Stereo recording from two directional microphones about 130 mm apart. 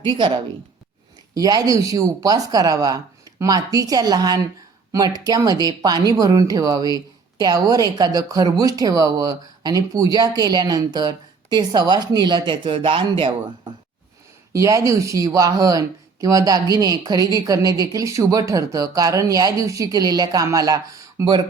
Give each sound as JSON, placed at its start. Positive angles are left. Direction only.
{"t": 0.1, "sound": "a woman's voice", "side_deg": -40}
{"t": 14.5, "sound": "speech", "side_deg": -25}